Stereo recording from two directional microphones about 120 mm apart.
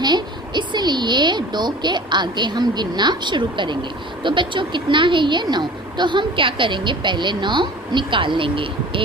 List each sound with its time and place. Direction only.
0.0 s speech: 40° right (ahead or behind)